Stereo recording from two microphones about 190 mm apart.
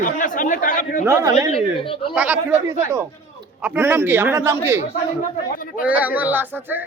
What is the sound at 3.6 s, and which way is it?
A man's voice, 10° right (ahead or behind).